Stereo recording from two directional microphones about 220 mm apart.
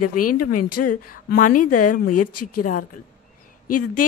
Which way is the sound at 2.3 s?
90° left.